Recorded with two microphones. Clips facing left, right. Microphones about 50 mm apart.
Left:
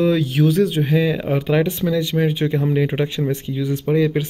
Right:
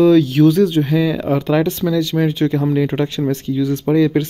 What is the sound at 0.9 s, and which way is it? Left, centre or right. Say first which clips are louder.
Speech: right 2 dB; left.